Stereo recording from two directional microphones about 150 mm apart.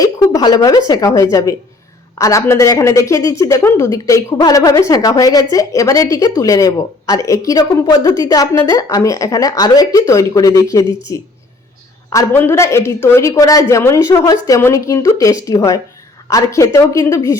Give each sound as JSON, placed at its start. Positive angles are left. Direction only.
{"t": 0.0, "sound": "speech", "side_deg": 25}